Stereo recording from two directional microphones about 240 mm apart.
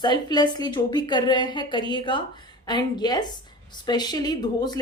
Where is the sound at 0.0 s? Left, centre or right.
Centre.